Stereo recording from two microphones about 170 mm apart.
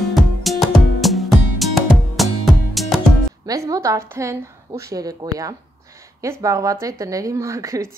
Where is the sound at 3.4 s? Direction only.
20° right (ahead or behind).